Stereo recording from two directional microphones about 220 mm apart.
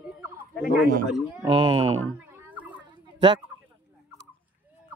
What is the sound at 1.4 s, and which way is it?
Speech, 20° right (ahead or behind).